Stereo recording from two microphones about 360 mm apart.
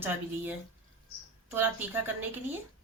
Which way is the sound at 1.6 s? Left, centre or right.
Centre.